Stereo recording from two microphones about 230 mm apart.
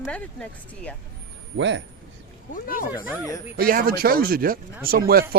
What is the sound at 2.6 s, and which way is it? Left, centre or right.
Speech, left.